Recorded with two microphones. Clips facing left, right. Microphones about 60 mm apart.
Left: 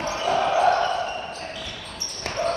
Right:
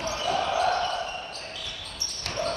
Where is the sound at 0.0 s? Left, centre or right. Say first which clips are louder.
Left 4 dB; left.